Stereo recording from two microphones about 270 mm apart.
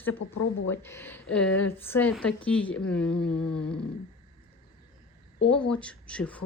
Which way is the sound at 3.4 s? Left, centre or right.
Left.